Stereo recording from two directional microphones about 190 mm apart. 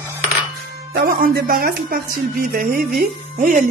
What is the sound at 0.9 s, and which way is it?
Speech, 50° right (ahead or behind).